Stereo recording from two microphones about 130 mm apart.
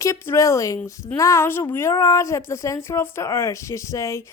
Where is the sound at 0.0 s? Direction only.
20° left (ahead or behind).